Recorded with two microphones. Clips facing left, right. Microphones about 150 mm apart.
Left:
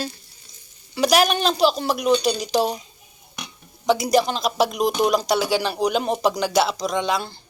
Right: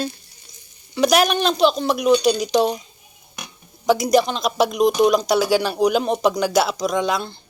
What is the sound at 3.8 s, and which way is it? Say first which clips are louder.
Speech: right 2 dB; centre (ahead or behind).